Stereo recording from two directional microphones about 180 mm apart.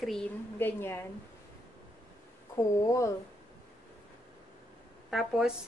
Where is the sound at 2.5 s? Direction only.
15° left (ahead or behind).